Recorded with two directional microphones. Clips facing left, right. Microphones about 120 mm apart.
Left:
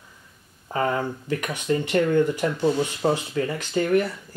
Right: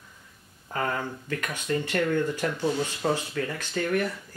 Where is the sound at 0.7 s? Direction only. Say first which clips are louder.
Left 5 dB; 20° left (ahead or behind).